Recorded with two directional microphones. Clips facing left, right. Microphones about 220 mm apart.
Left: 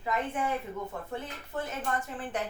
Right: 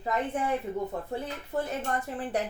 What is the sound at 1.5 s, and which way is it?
Speech, 35° right (ahead or behind).